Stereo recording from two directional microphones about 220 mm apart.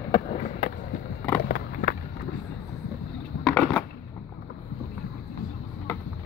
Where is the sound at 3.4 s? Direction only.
5° left (ahead or behind).